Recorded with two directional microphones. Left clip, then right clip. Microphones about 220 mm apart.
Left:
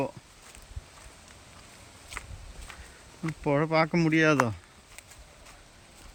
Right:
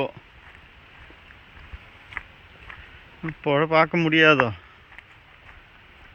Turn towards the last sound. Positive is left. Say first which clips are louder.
# right 7 dB
turn(degrees=10)  # may be behind; listen again after turning